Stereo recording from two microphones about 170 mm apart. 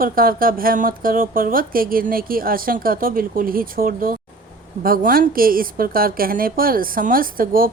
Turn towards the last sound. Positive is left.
turn(degrees=-55)  # may be behind; listen again after turning